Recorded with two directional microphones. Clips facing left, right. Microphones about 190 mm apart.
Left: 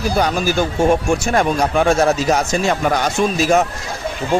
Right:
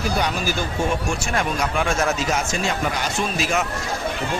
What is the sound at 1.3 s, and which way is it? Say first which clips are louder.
Speech: left 6 dB; 35° left (ahead or behind).